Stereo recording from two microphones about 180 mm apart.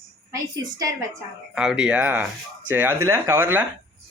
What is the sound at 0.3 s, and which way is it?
Speech, 20° right (ahead or behind).